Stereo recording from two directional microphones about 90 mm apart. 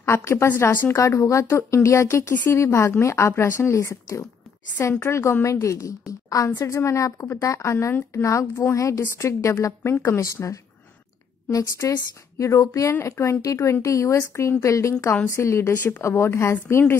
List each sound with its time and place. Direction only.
0.0 s speech: 30° left (ahead or behind)
0.9 s a woman's voice: 35° left (ahead or behind)
15.7 s speech: 20° left (ahead or behind)